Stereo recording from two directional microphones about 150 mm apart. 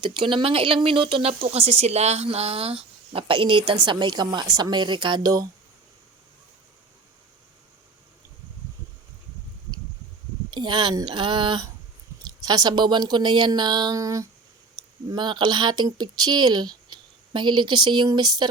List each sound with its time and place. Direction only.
0.0 s speech: 35° right (ahead or behind)
10.5 s speech: 30° right (ahead or behind)